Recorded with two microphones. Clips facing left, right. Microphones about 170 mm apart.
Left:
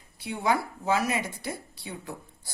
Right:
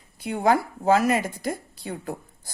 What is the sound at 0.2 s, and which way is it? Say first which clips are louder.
Speech: right 5 dB; 50° right (ahead or behind).